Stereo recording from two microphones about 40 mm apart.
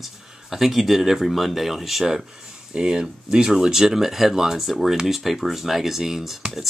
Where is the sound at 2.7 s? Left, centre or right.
Right.